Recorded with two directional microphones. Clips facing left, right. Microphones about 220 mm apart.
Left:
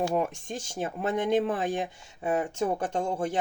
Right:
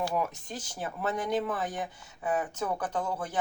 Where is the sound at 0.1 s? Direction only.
30° left (ahead or behind).